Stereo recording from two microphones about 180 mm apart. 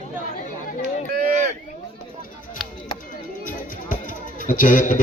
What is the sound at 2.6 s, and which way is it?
Music, centre (ahead or behind).